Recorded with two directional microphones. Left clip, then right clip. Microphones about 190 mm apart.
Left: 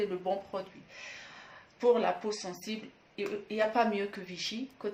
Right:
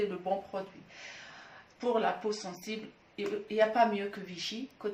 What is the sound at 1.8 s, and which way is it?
Speech, 30° left (ahead or behind).